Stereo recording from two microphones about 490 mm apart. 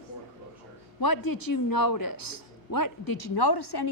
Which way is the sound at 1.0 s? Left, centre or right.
Left.